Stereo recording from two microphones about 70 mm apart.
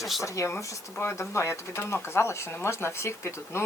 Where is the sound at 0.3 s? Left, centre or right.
Left.